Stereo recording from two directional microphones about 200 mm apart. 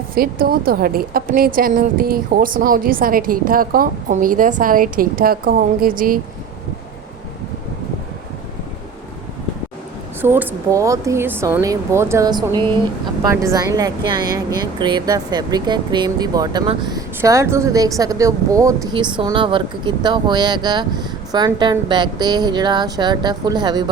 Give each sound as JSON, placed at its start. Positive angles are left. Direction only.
{"t": 0.1, "sound": "a woman's voice", "side_deg": -45}
{"t": 10.2, "sound": "a woman's voice", "side_deg": -10}